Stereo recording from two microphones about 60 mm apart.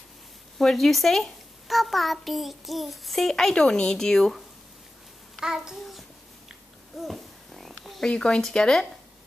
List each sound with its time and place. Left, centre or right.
0.6 s a child's voice: centre
5.4 s a child's voice: centre
7.0 s a sound: centre
8.0 s speech: centre